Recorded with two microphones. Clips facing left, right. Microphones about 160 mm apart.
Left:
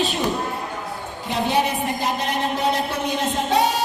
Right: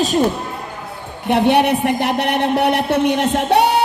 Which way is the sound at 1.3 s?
65° right (ahead or behind).